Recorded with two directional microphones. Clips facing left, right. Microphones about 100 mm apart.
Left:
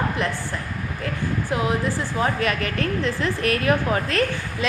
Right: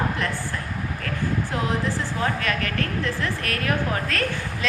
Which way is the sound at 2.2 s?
15° left (ahead or behind).